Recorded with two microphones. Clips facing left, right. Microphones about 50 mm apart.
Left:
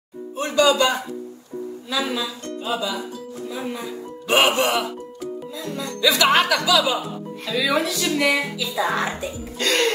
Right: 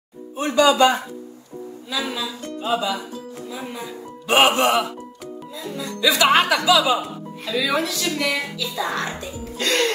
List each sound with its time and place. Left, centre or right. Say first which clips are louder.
0.7 s music: right 4 dB; right
1.9 s speech: left 1 dB; centre
2.4 s music: right 2 dB; centre
3.4 s speech: left 4 dB; centre
5.6 s speech: even; centre
6.3 s speech: right 1 dB; centre
7.4 s speech: left 1 dB; centre
9.6 s music: even; centre